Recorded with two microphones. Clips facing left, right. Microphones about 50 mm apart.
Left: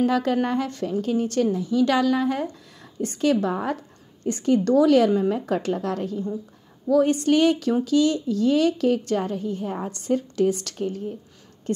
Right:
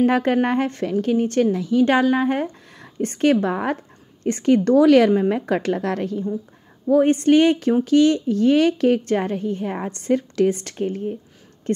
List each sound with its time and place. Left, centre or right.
0.0 s a woman's voice: right
1.9 s a woman's voice: right
6.9 s a woman's voice: right
10.5 s a woman's voice: right